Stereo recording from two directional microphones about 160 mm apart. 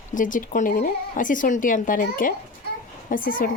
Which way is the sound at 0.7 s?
65° left (ahead or behind).